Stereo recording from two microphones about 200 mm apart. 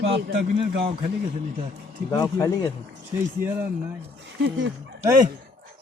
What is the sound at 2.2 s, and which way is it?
Speech, 20° left (ahead or behind).